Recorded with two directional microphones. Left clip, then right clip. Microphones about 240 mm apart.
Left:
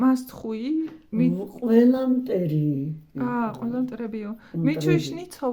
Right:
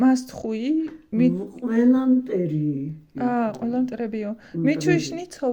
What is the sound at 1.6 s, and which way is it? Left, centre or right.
Speech, left.